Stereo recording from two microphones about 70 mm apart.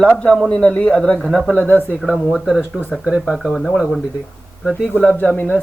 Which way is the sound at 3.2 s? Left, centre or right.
Centre.